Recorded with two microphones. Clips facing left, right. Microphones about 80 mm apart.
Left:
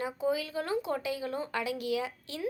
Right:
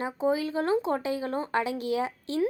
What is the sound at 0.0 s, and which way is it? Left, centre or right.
Speech, right.